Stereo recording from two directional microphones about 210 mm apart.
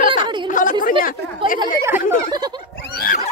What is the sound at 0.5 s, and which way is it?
Chatter, 40° left (ahead or behind).